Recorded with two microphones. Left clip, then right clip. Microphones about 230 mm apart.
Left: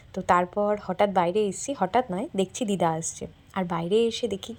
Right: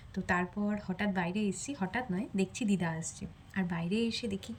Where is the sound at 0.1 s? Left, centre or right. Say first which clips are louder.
Left 11 dB; centre.